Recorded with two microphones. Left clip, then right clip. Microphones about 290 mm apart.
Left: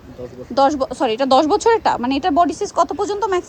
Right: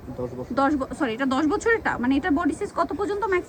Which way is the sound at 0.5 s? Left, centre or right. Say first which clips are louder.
Left 8 dB; centre.